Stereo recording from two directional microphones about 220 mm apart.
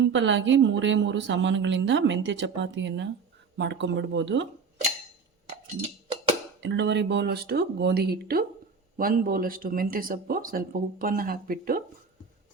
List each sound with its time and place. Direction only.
0.0 s a woman's voice: 55° right (ahead or behind)
6.6 s speech: 55° right (ahead or behind)